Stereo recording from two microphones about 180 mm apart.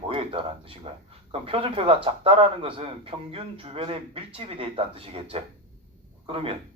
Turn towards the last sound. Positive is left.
turn(degrees=-30)  # may be behind; listen again after turning